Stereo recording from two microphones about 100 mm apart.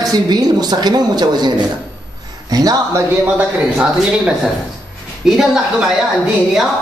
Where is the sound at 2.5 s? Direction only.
40° right (ahead or behind).